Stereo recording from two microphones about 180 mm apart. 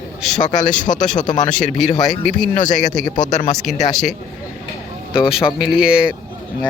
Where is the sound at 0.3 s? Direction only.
45° left (ahead or behind).